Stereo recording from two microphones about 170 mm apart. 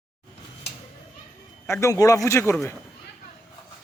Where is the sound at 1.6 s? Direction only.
15° left (ahead or behind).